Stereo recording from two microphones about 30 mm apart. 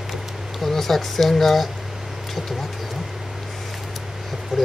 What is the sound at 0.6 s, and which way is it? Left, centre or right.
Speech, centre.